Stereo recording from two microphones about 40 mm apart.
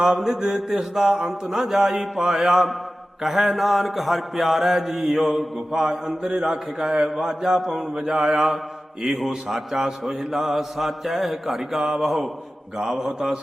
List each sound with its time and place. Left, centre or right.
0.0 s mantra: centre
5.5 s mantra: centre
12.7 s mantra: centre